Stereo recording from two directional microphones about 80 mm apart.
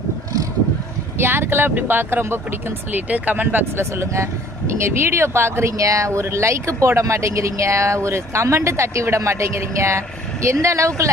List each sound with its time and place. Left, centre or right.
1.2 s speech: right